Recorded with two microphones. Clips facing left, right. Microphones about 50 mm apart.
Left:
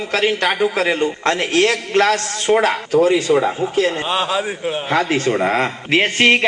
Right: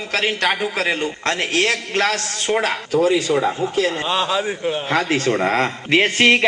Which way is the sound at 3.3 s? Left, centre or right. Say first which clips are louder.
Left 3 dB; centre.